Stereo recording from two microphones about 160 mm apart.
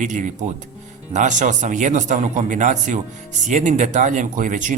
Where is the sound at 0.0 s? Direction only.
50° right (ahead or behind).